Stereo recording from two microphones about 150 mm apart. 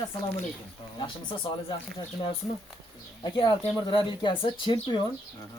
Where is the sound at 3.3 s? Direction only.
30° left (ahead or behind).